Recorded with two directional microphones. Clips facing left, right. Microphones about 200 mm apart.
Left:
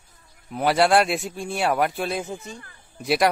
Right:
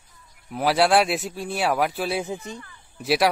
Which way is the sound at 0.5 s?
Centre (ahead or behind).